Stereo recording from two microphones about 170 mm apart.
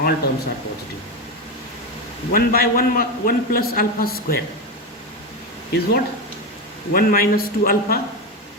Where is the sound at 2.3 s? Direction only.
60° left (ahead or behind).